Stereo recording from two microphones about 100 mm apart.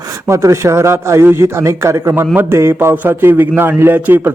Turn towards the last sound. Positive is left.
turn(degrees=-20)  # may be behind; listen again after turning